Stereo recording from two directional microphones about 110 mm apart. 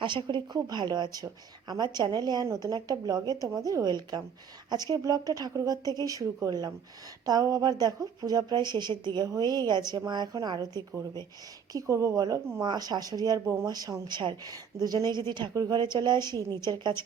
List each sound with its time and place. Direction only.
0.0 s a woman's voice: 45° right (ahead or behind)
11.7 s a woman's voice: 30° right (ahead or behind)